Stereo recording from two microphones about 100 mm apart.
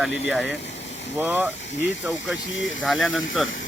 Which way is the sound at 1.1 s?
20° right (ahead or behind).